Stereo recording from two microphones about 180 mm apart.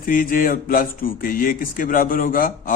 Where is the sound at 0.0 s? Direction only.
50° left (ahead or behind).